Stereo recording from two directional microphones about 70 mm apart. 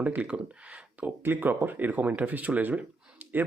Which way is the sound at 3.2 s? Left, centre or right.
Right.